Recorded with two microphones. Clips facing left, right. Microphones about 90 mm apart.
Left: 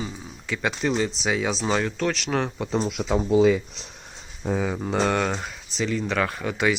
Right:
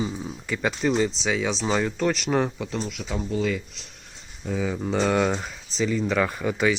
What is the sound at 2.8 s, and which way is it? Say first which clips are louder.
Speech: left 8 dB; 50° left (ahead or behind).